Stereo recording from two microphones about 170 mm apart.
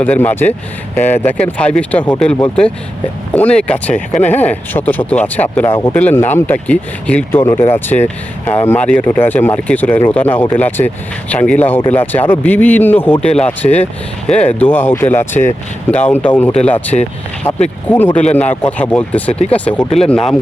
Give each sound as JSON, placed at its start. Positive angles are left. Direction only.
{"t": 0.0, "sound": "speech", "side_deg": 10}
{"t": 16.9, "sound": "speech", "side_deg": 40}
{"t": 17.8, "sound": "speech", "side_deg": 10}